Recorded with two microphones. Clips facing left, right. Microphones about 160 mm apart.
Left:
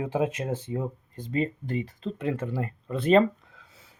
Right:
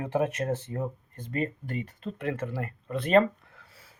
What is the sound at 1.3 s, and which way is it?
Speech, 25° left (ahead or behind).